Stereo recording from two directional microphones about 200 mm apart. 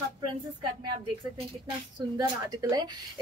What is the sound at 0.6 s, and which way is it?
Speech, 25° right (ahead or behind).